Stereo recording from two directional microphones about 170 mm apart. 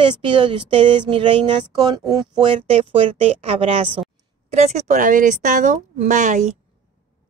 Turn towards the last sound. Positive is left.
turn(degrees=-45)  # may be behind; listen again after turning